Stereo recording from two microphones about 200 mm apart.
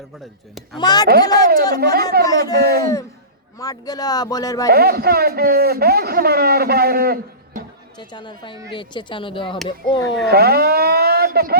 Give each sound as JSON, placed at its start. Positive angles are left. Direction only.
{"t": 0.8, "sound": "speech", "side_deg": 20}
{"t": 1.0, "sound": "a man's voice", "side_deg": -50}
{"t": 3.6, "sound": "speech", "side_deg": 20}
{"t": 4.7, "sound": "a man's voice", "side_deg": -50}
{"t": 7.9, "sound": "speech", "side_deg": 20}
{"t": 10.2, "sound": "speech", "side_deg": -50}